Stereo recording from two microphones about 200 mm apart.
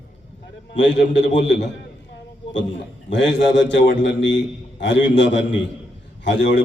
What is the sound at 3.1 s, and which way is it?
A man's voice, 65° left (ahead or behind).